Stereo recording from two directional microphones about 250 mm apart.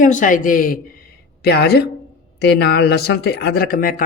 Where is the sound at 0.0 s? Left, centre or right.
Left.